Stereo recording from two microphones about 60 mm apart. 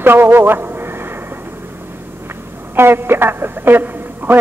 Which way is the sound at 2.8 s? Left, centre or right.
Right.